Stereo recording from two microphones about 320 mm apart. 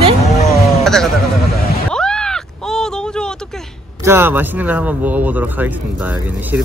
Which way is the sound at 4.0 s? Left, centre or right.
Centre.